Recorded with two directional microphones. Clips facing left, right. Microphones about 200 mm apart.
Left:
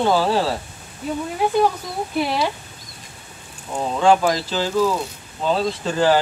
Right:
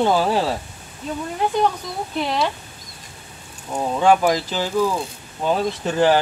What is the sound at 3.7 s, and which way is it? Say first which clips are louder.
Speech: even; 15° right (ahead or behind).